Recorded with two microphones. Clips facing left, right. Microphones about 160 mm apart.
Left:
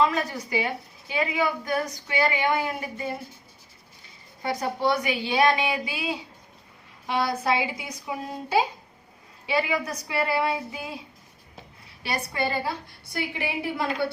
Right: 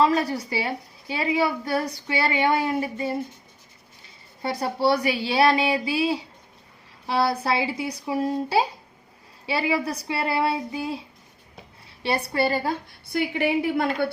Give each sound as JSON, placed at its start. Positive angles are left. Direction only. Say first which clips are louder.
{"t": 0.0, "sound": "a woman's voice", "louder": "right 3 dB", "side_deg": -35}
{"t": 4.4, "sound": "a woman's voice", "louder": "right 2 dB", "side_deg": -30}
{"t": 12.0, "sound": "a woman's voice", "louder": "right 5 dB", "side_deg": -30}
{"t": 13.1, "sound": "a woman's voice", "louder": "right 7 dB", "side_deg": -55}